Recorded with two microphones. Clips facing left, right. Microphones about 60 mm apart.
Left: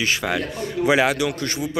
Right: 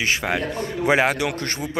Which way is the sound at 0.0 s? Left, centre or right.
Right.